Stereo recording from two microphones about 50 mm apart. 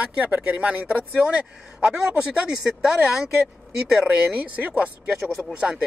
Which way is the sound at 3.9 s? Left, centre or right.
Centre.